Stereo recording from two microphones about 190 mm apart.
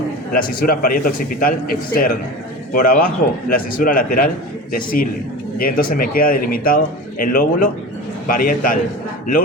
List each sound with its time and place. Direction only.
0.3 s a man's voice: 50° left (ahead or behind)